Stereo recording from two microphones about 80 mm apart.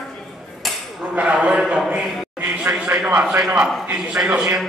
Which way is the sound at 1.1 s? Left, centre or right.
Centre.